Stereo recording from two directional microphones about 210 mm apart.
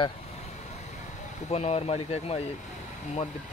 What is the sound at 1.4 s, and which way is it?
Speech, 30° left (ahead or behind).